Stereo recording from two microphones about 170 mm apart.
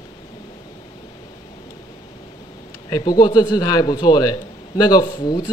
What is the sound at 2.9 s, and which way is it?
A man's voice, 25° left (ahead or behind).